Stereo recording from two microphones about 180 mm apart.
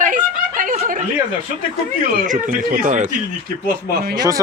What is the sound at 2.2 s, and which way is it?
Speech, 45° right (ahead or behind).